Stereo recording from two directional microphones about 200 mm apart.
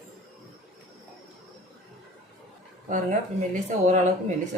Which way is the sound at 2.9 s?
40° right (ahead or behind).